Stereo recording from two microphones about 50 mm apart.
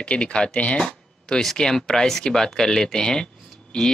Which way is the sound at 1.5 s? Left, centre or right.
Centre.